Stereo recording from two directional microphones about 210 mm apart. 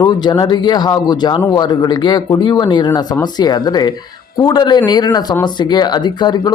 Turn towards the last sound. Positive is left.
turn(degrees=20)  # may be behind; listen again after turning